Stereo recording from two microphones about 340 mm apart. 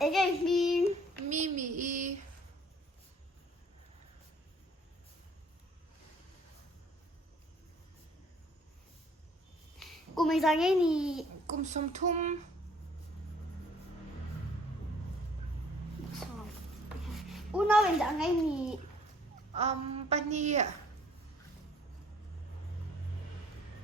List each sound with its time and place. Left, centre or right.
0.0 s child singing: centre
1.3 s child singing: right
9.7 s a sound: centre
11.4 s a woman's voice: right
17.2 s speech: centre
19.5 s a woman's voice: centre